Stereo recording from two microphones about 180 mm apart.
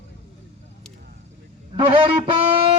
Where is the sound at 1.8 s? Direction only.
30° right (ahead or behind).